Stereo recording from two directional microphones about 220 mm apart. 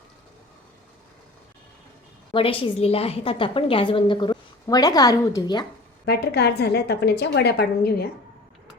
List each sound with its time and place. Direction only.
2.3 s a woman's voice: 25° left (ahead or behind)
6.1 s a woman's voice: 45° left (ahead or behind)